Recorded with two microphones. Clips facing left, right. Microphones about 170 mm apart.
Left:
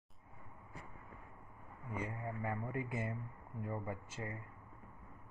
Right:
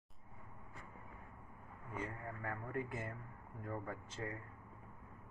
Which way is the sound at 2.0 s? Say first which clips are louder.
Left 3 dB; 15° left (ahead or behind).